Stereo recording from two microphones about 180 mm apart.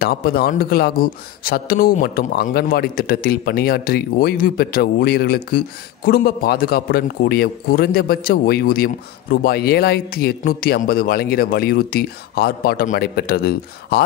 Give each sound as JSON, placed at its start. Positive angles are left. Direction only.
{"t": 0.0, "sound": "a man's voice", "side_deg": 55}